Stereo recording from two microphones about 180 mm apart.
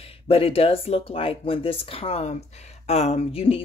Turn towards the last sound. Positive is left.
turn(degrees=30)  # may be behind; listen again after turning